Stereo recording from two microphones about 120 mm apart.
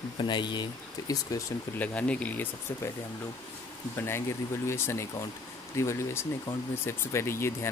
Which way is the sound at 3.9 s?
20° left (ahead or behind).